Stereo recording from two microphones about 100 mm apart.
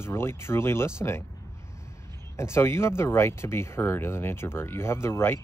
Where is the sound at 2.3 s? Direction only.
25° left (ahead or behind).